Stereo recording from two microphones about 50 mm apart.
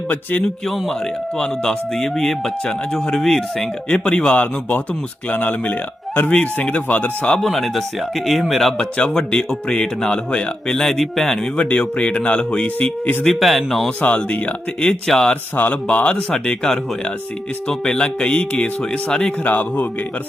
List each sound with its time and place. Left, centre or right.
0.1 s speech: left
0.4 s speech: centre; by 4.8 s left
5.3 s speech: left
7.4 s speech: centre
8.8 s speech: left
10.8 s speech: centre
11.5 s speech: left
13.2 s speech: centre
14.0 s speech: left
14.8 s speech: centre
15.5 s speech: left
17.8 s speech: centre
19.5 s speech: left